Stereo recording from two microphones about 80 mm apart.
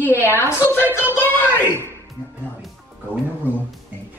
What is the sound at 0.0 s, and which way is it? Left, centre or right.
Speech, left.